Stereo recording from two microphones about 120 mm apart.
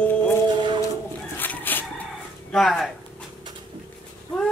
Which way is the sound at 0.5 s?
40° right (ahead or behind).